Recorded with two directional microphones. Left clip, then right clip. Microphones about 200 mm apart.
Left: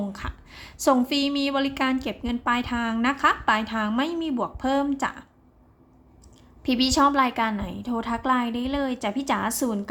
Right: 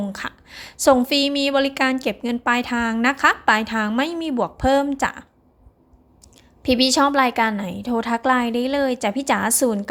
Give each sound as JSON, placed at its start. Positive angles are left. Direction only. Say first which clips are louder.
{"t": 0.1, "sound": "a woman's voice", "louder": "right 6 dB", "side_deg": -30}
{"t": 6.6, "sound": "a woman's voice", "louder": "right 4 dB", "side_deg": -30}